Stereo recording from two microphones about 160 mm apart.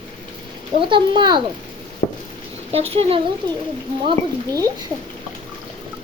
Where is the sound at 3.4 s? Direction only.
25° right (ahead or behind).